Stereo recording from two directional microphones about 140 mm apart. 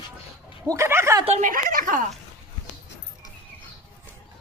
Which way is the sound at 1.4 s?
75° right (ahead or behind).